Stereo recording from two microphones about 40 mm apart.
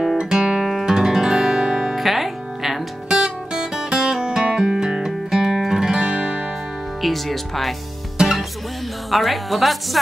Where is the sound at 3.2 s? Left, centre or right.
Centre.